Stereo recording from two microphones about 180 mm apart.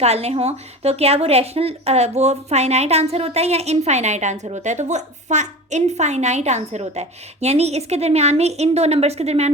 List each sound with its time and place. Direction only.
0.0 s a woman's voice: 35° right (ahead or behind)